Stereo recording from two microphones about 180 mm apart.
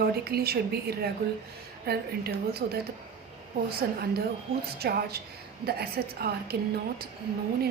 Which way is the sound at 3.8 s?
55° right (ahead or behind).